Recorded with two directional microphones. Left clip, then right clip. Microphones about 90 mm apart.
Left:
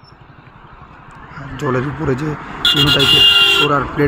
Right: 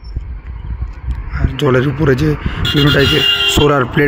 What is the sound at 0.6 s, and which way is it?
Horse, 40° left (ahead or behind).